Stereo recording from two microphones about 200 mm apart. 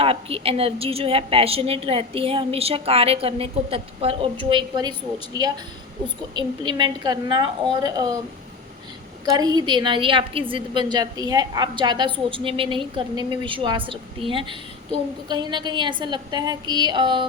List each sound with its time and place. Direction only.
0.0 s a woman's voice: 30° right (ahead or behind)
9.3 s a woman's voice: 20° right (ahead or behind)